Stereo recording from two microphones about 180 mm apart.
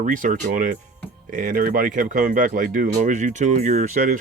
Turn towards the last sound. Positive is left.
turn(degrees=-40)  # may be behind; listen again after turning